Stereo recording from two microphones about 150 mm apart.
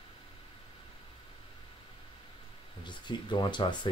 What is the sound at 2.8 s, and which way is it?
Speech, 30° left (ahead or behind).